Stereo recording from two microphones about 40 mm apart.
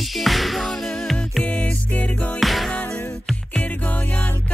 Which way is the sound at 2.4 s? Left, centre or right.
Centre.